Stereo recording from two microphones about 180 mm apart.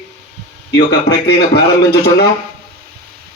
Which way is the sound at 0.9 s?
65° left (ahead or behind).